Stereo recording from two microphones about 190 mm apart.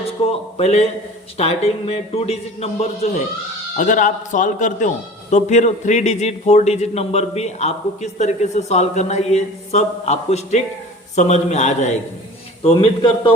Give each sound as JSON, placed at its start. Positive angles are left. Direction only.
{"t": 0.0, "sound": "a man's voice", "side_deg": 30}
{"t": 12.6, "sound": "a man's voice", "side_deg": 25}